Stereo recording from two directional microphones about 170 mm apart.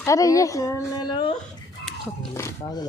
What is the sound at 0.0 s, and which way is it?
A woman's voice, 20° left (ahead or behind).